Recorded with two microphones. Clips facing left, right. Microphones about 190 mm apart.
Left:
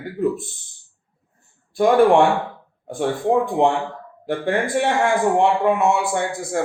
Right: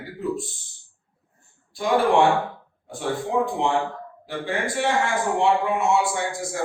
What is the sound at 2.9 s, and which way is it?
Speech, 55° left (ahead or behind).